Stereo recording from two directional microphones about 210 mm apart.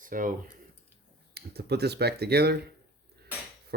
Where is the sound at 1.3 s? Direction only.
50° right (ahead or behind).